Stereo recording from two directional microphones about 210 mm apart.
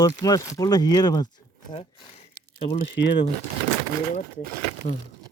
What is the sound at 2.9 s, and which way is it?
Speech, 55° left (ahead or behind).